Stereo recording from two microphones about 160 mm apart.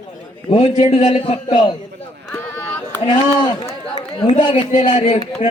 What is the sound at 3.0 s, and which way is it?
A man's voice, 30° left (ahead or behind).